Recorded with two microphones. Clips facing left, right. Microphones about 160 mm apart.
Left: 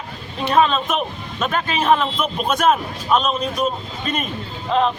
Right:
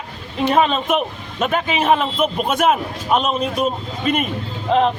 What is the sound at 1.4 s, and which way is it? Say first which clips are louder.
A man's voice: right 2 dB; 10° right (ahead or behind).